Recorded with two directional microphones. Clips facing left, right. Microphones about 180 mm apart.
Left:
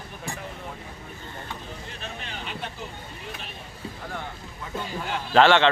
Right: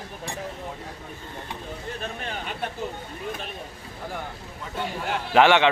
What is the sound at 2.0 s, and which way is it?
Speech, 50° right (ahead or behind).